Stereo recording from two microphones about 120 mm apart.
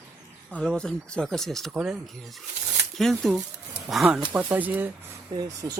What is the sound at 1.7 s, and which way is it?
Speech, 10° right (ahead or behind).